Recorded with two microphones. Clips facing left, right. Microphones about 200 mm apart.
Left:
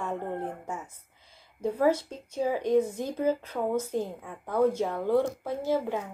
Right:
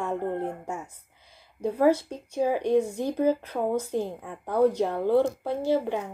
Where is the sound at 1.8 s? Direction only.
10° right (ahead or behind).